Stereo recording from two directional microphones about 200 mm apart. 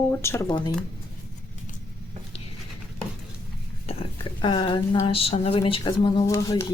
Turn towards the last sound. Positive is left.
turn(degrees=15)  # may be behind; listen again after turning